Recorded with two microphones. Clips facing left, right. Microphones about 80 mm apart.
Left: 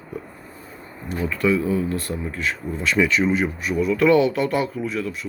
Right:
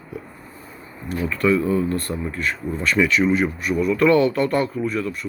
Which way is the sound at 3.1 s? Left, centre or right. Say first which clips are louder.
Right 2 dB; left.